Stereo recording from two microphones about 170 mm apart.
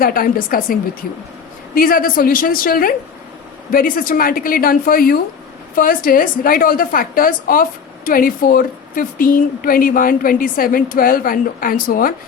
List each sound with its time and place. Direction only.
0.0 s a woman's voice: 60° left (ahead or behind)